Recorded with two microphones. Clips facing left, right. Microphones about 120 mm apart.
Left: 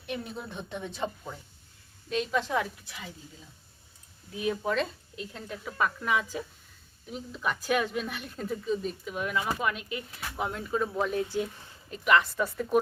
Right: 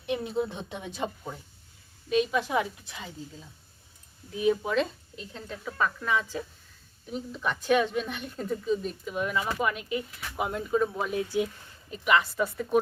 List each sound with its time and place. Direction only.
0.0 s speech: 20° right (ahead or behind)
4.6 s a woman's voice: centre (ahead or behind)